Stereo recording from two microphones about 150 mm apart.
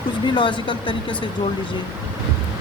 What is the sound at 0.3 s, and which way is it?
Speech, 30° left (ahead or behind).